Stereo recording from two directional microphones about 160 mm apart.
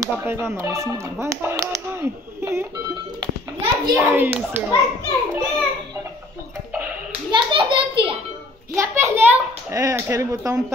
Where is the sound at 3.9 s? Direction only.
10° right (ahead or behind).